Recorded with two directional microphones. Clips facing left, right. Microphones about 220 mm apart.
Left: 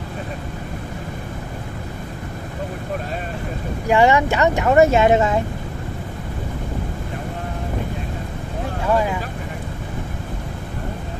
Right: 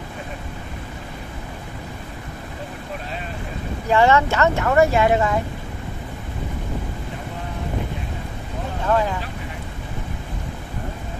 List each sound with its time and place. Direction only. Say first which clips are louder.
3.9 s speech: left 1 dB; 15° left (ahead or behind)
8.8 s speech: left 1 dB; 10° left (ahead or behind)